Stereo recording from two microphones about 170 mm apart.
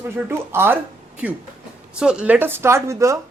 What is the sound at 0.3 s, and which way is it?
Speech, 15° right (ahead or behind).